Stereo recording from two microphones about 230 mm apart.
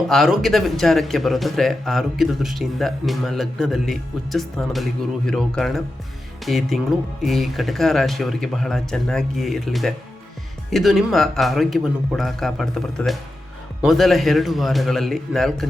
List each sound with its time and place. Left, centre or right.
0.1 s speech: centre